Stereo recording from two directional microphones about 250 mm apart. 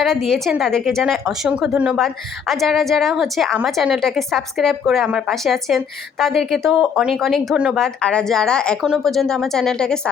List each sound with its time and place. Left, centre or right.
0.0 s a woman's voice: centre